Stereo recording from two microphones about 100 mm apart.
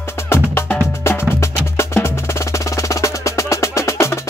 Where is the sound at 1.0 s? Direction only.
25° left (ahead or behind).